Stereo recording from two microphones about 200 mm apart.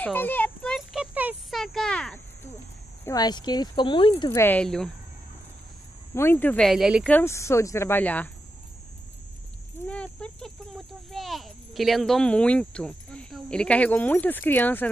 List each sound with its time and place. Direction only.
0.0 s a sound: 10° left (ahead or behind)
3.1 s speech: 20° left (ahead or behind)
4.3 s speech: 10° left (ahead or behind)
6.1 s speech: 10° left (ahead or behind)
7.1 s speech: 10° left (ahead or behind)
9.8 s a sound: 5° left (ahead or behind)